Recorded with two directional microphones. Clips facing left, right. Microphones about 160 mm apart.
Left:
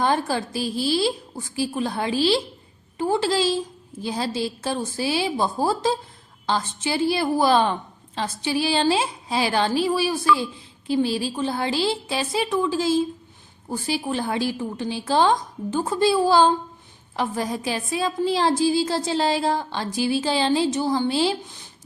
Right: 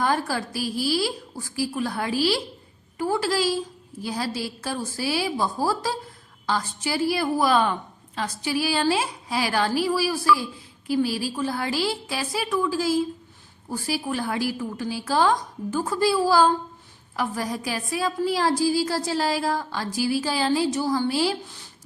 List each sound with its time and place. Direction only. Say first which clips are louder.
0.0 s a woman's voice: left 2 dB; 25° left (ahead or behind)